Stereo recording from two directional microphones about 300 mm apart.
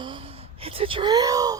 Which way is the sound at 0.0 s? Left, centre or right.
Centre.